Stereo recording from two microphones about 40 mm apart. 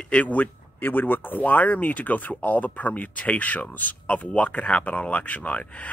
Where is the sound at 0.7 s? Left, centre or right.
Left.